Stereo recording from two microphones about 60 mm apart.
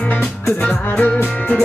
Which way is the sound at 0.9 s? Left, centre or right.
Left.